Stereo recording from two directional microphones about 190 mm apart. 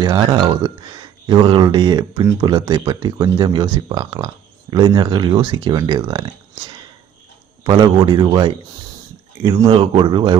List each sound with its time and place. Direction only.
0.0 s speech: 20° right (ahead or behind)